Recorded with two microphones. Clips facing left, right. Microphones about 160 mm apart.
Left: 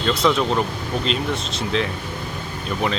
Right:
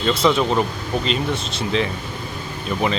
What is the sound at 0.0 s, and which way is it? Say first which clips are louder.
Speech: right 1 dB; centre (ahead or behind).